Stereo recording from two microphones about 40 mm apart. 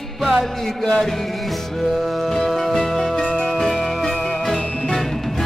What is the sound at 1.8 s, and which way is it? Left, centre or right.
Music, centre.